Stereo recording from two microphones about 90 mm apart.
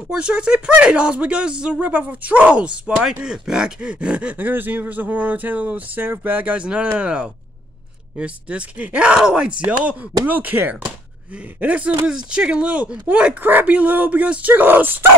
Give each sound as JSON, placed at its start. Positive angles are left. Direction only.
{"t": 0.1, "sound": "speech", "side_deg": -10}